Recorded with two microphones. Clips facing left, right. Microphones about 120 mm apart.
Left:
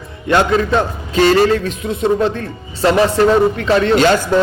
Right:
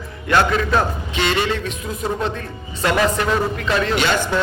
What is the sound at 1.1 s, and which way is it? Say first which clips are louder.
A man's voice: left 10 dB; 40° left (ahead or behind).